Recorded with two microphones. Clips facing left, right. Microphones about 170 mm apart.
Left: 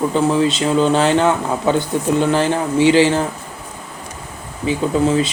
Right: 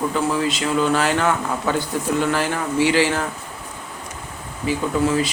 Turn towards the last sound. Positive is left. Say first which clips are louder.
# left 4 dB
turn(degrees=25)  # may be behind; listen again after turning